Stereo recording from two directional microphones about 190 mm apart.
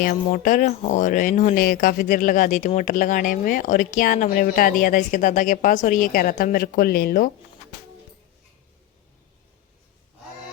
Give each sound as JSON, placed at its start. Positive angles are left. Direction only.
{"t": 0.0, "sound": "speech", "side_deg": 45}